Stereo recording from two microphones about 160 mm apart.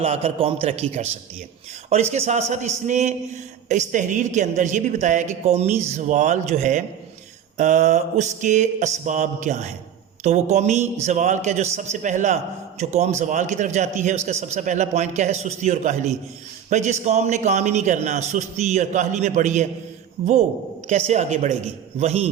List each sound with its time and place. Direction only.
0.0 s a man's voice: 40° right (ahead or behind)